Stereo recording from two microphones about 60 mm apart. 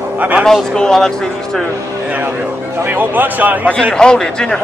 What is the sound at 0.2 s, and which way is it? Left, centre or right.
Speech, right.